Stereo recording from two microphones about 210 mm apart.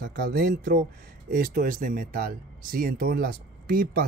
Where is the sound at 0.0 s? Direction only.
45° right (ahead or behind).